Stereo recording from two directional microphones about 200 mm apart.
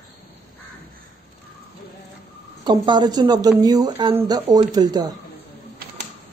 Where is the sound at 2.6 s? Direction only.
20° right (ahead or behind).